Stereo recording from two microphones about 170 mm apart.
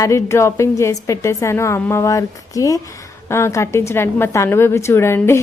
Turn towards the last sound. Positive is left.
turn(degrees=15)  # may be behind; listen again after turning